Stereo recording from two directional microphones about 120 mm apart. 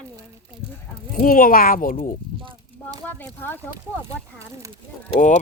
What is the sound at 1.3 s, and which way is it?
Speech, 90° left.